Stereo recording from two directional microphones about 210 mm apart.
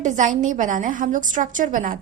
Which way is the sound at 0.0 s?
35° right (ahead or behind).